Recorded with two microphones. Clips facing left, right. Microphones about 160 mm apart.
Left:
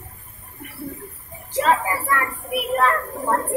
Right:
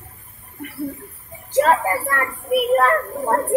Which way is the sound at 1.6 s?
45° right (ahead or behind).